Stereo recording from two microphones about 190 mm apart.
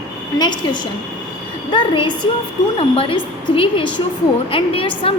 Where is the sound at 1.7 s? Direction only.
25° left (ahead or behind).